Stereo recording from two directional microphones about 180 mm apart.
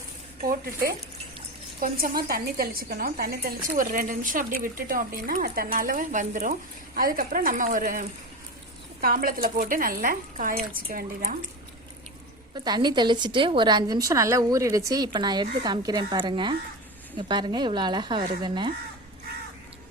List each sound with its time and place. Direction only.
0.4 s speech: 55° right (ahead or behind)
12.5 s a woman's voice: 25° right (ahead or behind)